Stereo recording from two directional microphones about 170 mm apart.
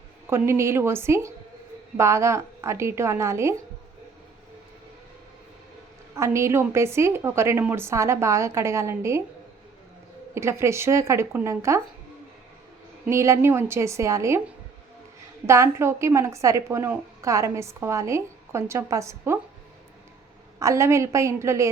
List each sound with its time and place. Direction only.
0.3 s a woman's voice: 15° right (ahead or behind)
6.1 s a woman's voice: 15° right (ahead or behind)
10.3 s a woman's voice: 15° right (ahead or behind)
13.1 s a woman's voice: 15° right (ahead or behind)
15.4 s a woman's voice: 15° right (ahead or behind)
20.6 s a woman's voice: 20° right (ahead or behind)